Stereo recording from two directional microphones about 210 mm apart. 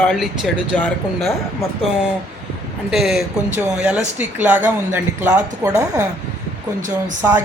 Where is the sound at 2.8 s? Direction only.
Centre (ahead or behind).